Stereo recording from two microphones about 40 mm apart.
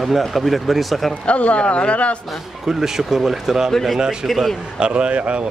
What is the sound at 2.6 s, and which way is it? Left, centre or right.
Speech, centre.